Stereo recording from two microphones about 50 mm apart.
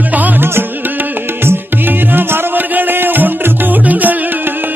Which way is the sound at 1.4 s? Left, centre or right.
Right.